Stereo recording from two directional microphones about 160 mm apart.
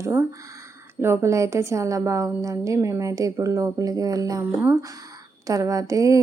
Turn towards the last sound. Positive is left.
turn(degrees=-20)  # may be behind; listen again after turning